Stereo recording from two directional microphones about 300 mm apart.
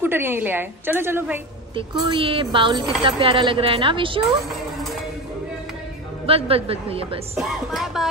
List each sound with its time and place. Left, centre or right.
0.0 s a woman's voice: centre
6.2 s a woman's voice: centre
7.3 s speech: centre